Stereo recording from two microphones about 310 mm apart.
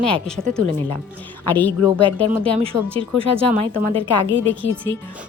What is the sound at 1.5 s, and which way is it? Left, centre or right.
Speech, centre.